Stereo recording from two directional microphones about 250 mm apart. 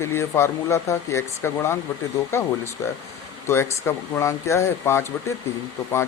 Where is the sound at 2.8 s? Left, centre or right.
Centre.